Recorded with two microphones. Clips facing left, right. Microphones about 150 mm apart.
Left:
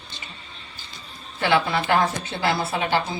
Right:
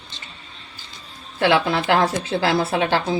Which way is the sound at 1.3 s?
80° right.